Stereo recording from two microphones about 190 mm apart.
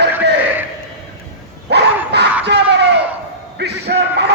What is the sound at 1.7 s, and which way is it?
Dog, 60° right (ahead or behind).